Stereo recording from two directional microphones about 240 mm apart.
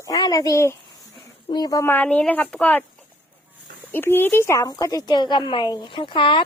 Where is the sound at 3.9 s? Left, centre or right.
Centre.